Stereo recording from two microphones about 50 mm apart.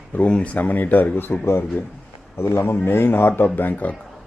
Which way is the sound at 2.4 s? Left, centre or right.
Left.